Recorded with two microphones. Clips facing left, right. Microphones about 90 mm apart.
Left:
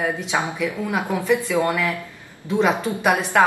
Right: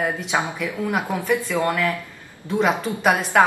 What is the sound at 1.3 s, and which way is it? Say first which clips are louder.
Speech: left 2 dB; 15° left (ahead or behind).